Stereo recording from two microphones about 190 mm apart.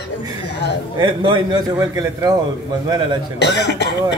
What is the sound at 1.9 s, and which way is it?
Speech, 20° right (ahead or behind).